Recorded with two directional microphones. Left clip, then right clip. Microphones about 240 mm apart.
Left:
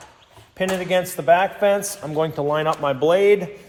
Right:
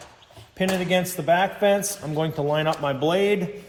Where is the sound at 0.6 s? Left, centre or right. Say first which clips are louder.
Left 2 dB; left.